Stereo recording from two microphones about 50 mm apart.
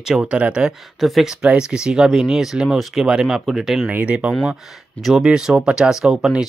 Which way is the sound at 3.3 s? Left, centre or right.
Centre.